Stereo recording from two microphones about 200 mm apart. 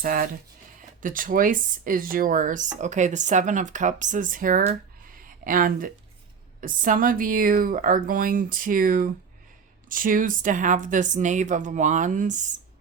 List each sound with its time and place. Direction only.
0.0 s a woman's voice: 45° right (ahead or behind)